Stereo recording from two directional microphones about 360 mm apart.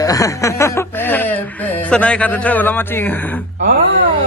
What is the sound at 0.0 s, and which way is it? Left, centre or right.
Speech, centre.